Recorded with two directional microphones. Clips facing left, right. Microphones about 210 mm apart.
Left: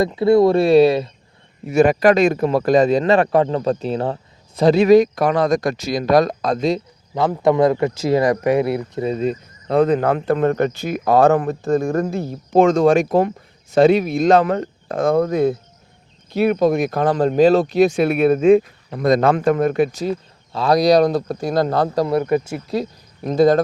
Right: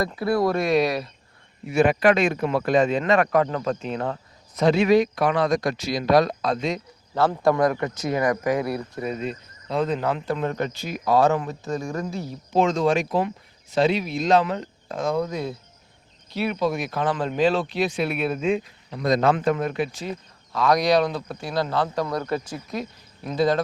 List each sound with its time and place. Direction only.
0.0 s speech: 25° left (ahead or behind)
1.6 s speech: 40° left (ahead or behind)
7.1 s speech: 15° left (ahead or behind)
9.2 s speech: 55° left (ahead or behind)
22.0 s speech: 20° left (ahead or behind)
22.7 s speech: 40° left (ahead or behind)